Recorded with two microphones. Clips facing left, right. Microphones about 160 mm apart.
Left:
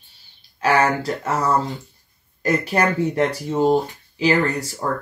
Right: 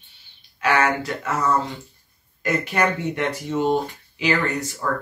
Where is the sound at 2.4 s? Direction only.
35° left (ahead or behind).